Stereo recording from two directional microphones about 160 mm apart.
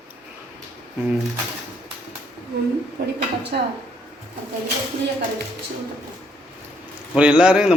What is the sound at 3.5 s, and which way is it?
Speech, 65° right (ahead or behind).